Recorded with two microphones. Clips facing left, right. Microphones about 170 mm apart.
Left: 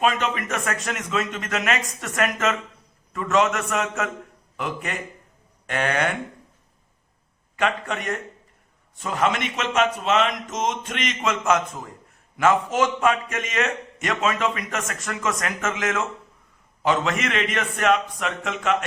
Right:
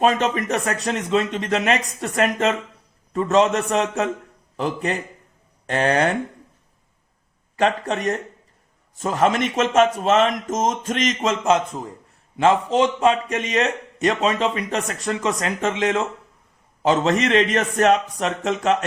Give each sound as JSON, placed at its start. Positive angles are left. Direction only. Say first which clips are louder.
{"t": 0.0, "sound": "a man's voice", "louder": "right 4 dB", "side_deg": -35}
{"t": 7.5, "sound": "a man's voice", "louder": "right 4 dB", "side_deg": -35}